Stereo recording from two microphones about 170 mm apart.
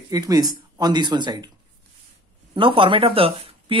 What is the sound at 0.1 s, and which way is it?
Speech, 20° right (ahead or behind).